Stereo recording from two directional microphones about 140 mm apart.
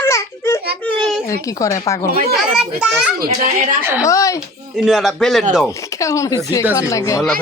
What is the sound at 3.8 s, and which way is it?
Speech, 15° right (ahead or behind).